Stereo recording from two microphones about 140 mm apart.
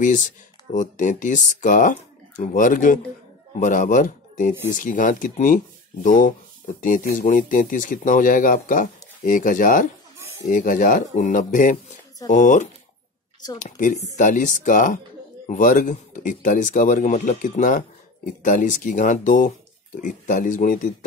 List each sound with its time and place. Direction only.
0.0 s speech: 65° left (ahead or behind)